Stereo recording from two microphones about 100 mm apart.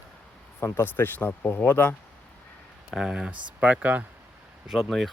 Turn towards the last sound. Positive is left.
turn(degrees=0)  # may be behind; listen again after turning